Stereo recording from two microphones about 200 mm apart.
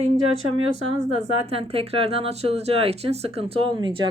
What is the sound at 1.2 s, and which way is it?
A woman's voice, 30° right (ahead or behind).